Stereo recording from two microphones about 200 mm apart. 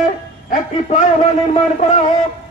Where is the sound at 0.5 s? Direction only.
40° left (ahead or behind).